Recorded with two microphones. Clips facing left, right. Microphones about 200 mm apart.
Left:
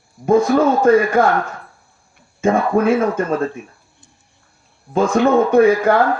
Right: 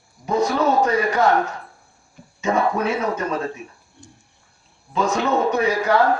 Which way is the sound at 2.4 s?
50° left (ahead or behind).